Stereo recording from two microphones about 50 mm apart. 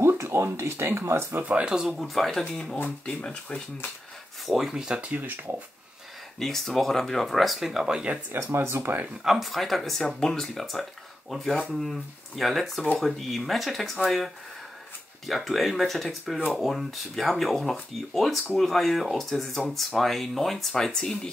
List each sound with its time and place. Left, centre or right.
0.2 s a sound: right
0.5 s speech: right
1.4 s speech: right
2.0 s speech: centre
4.5 s speech: centre
5.1 s speech: right
6.4 s speech: centre
8.3 s speech: right
9.2 s speech: centre